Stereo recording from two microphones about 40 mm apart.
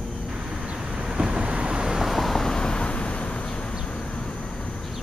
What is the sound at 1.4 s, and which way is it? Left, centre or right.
Vehicle, right.